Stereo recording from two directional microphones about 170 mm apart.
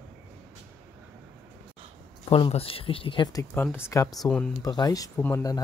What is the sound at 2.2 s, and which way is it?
Speech, 35° left (ahead or behind).